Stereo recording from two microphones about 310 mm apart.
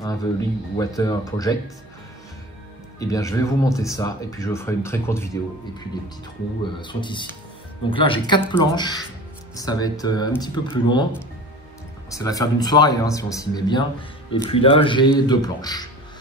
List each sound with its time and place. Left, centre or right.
0.0 s speech: centre
3.0 s speech: centre
6.8 s speech: centre
12.1 s speech: centre